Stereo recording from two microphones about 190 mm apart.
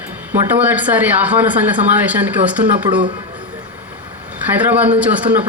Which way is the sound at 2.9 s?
25° right (ahead or behind).